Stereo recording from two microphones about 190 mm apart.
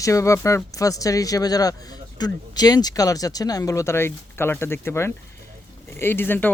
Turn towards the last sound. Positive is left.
turn(degrees=10)  # may be behind; listen again after turning